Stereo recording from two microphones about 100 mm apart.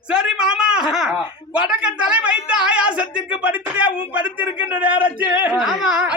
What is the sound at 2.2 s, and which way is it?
Music, 10° right (ahead or behind).